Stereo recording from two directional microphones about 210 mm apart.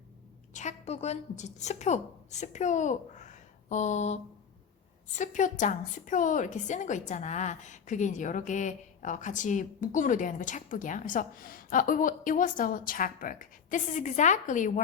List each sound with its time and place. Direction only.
0.5 s a woman's voice: 35° left (ahead or behind)